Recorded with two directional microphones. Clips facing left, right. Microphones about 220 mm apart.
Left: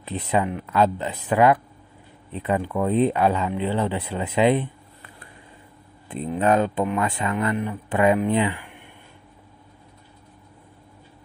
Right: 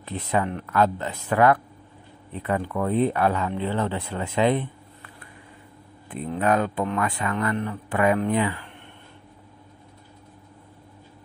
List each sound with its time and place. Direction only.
0.0 s speech: 15° left (ahead or behind)
6.0 s speech: 25° left (ahead or behind)
7.5 s speech: 10° left (ahead or behind)
7.9 s speech: 25° left (ahead or behind)